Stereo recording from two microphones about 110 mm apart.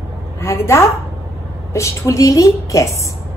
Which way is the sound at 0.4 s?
20° left (ahead or behind).